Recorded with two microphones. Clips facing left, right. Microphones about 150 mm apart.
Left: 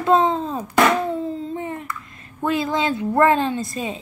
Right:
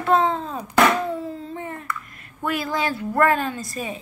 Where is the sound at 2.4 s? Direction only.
20° left (ahead or behind).